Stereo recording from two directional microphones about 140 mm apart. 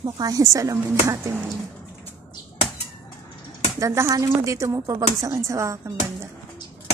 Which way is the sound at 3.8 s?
20° right (ahead or behind).